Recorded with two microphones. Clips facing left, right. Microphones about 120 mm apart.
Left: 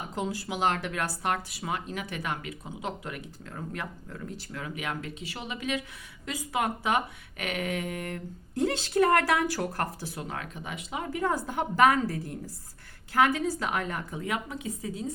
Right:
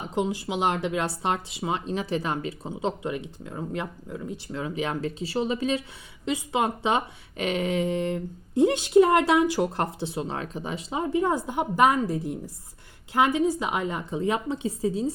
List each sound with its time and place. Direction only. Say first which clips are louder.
0.1 s speech: right 7 dB; 20° right (ahead or behind)